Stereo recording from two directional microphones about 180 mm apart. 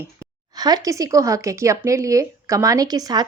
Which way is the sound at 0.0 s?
20° right (ahead or behind).